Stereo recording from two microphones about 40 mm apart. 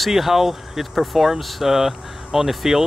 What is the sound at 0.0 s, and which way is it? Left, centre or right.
Speech, centre.